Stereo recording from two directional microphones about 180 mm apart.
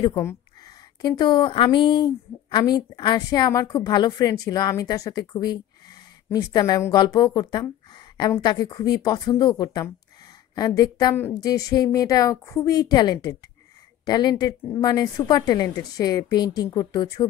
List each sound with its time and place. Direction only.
0.1 s a woman's voice: 15° left (ahead or behind)